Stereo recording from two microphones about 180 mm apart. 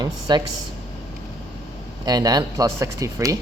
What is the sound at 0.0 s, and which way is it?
Speech, 25° right (ahead or behind).